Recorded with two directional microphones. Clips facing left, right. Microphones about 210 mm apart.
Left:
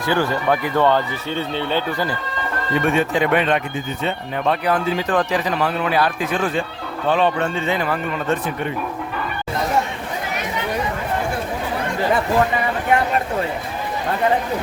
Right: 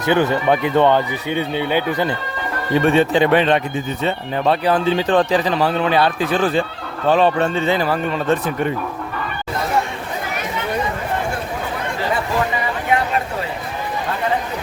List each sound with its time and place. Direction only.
0.0 s speech: 20° right (ahead or behind)
2.7 s speech: 30° right (ahead or behind)